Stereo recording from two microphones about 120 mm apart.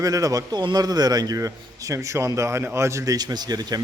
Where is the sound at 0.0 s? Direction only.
30° right (ahead or behind).